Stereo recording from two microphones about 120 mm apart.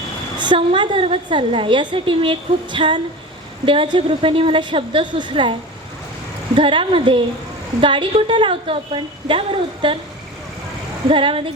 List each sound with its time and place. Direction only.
0.3 s a woman's voice: 40° right (ahead or behind)
6.6 s a woman's voice: 45° right (ahead or behind)
11.1 s a woman's voice: 45° right (ahead or behind)